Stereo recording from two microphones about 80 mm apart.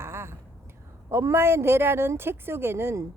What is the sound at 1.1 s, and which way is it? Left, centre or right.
Speech, right.